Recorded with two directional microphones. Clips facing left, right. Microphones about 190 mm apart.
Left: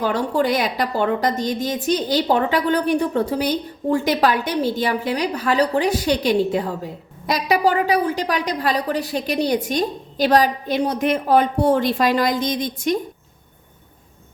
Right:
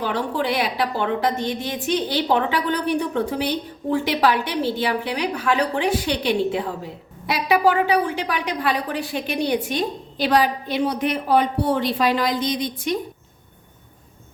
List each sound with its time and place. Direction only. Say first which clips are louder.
0.0 s a woman's voice: left 4 dB; 45° left (ahead or behind)